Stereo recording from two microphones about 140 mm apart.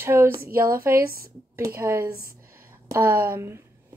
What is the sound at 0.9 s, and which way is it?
Speech, 90° right.